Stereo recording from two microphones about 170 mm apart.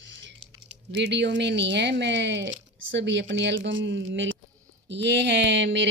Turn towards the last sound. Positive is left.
turn(degrees=-90)